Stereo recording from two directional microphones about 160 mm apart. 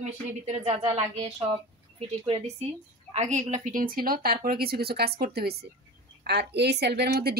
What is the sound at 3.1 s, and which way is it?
A woman's voice, 45° right (ahead or behind).